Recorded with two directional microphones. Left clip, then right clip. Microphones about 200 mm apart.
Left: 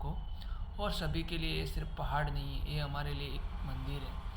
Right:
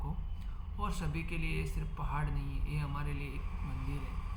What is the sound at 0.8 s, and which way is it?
Speech, centre (ahead or behind).